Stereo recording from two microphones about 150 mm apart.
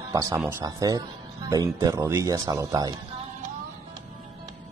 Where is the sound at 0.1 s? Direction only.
20° right (ahead or behind).